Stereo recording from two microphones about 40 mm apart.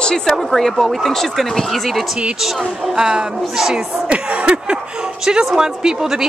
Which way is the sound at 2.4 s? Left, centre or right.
Centre.